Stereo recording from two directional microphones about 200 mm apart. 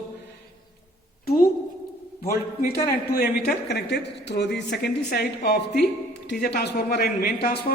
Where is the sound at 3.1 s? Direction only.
50° left (ahead or behind).